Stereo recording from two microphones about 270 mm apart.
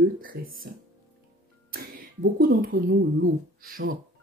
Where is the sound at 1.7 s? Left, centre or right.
Right.